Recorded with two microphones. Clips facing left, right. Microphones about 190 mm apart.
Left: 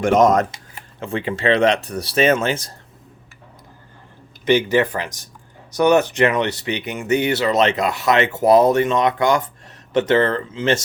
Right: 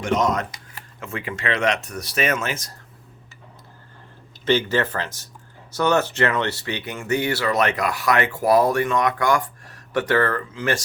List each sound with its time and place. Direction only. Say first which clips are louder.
0.0 s speech: left 7 dB; 50° left (ahead or behind)
0.5 s speech: left 2 dB; 30° left (ahead or behind)
4.4 s speech: left 4 dB; 15° left (ahead or behind)